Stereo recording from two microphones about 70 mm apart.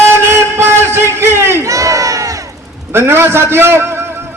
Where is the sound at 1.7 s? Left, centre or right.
Right.